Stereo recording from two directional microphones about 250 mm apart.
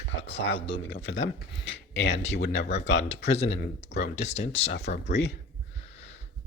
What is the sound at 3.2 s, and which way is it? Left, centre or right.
Speech, left.